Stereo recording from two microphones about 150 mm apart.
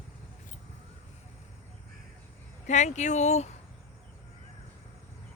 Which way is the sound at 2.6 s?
50° left (ahead or behind).